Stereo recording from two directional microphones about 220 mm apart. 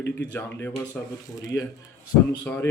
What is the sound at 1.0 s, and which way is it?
Speech, 5° left (ahead or behind).